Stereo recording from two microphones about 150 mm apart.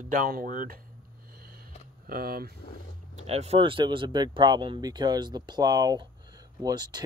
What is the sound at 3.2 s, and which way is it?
Speech, 45° right (ahead or behind).